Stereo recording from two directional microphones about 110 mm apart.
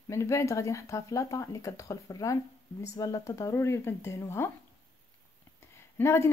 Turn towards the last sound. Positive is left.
turn(degrees=25)  # may be behind; listen again after turning